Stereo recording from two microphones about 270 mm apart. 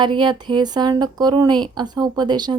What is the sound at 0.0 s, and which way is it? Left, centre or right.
Speech, centre.